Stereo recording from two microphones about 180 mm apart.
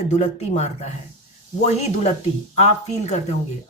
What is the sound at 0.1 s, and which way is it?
Speech, 40° left (ahead or behind).